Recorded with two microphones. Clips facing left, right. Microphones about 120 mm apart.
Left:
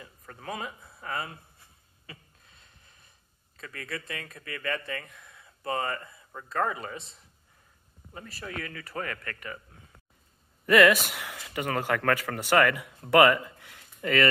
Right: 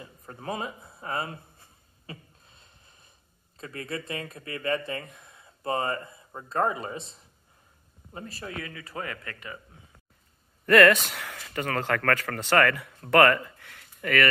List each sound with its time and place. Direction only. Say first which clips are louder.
0.0 s speech: right 4 dB; 30° right (ahead or behind)
2.0 s a sound: right 6 dB; 25° right (ahead or behind)
3.5 s speech: right 4 dB; 25° right (ahead or behind)
10.6 s speech: right 2 dB; 5° left (ahead or behind); by 14.2 s 25° left (ahead or behind)